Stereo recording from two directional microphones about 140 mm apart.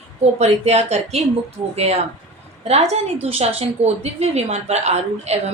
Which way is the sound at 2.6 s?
50° right (ahead or behind).